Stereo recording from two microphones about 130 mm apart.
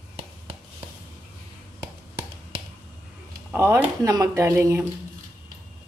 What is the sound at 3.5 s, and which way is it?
Speech, 15° right (ahead or behind).